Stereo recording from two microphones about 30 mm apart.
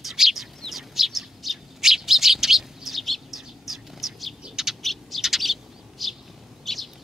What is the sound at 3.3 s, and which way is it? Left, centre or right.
Bird, centre.